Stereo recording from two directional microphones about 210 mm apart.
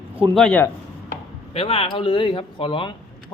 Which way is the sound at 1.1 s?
25° left (ahead or behind).